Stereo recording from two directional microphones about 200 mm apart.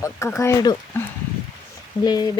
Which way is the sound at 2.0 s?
20° left (ahead or behind).